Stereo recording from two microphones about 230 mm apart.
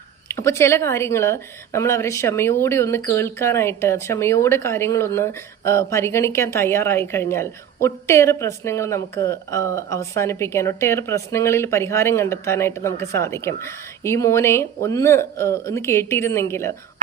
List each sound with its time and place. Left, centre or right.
0.3 s speech: centre